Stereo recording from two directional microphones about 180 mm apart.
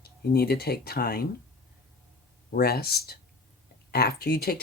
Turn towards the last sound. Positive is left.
turn(degrees=60)  # may be behind; listen again after turning